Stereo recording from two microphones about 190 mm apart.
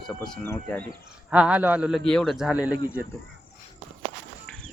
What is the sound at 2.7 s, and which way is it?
Speech, 20° left (ahead or behind).